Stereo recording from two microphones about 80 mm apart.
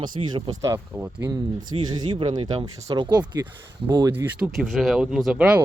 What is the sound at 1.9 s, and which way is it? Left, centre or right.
Speech, right.